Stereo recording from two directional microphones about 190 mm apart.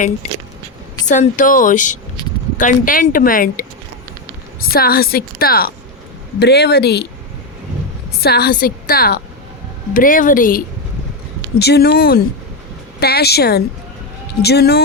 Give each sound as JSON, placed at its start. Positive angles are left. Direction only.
{"t": 0.2, "sound": "a sound", "side_deg": 40}
{"t": 1.0, "sound": "speech", "side_deg": 40}
{"t": 4.7, "sound": "speech", "side_deg": 50}
{"t": 8.2, "sound": "speech", "side_deg": 55}
{"t": 11.6, "sound": "speech", "side_deg": 55}